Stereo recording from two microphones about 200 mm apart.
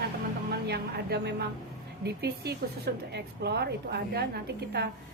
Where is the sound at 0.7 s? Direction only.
55° right (ahead or behind).